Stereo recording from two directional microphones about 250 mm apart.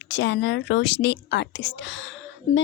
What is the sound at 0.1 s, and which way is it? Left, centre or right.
Speech, left.